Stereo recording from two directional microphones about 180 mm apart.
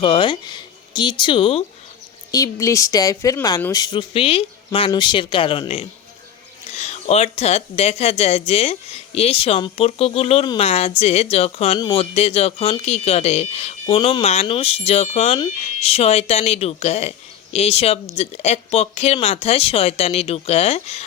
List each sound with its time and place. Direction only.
0.0 s speech: 25° left (ahead or behind)
2.3 s a woman's voice: 20° left (ahead or behind); by 21.0 s 35° left (ahead or behind)